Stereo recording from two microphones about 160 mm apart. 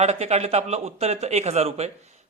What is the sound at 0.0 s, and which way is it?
Speech, 45° right (ahead or behind).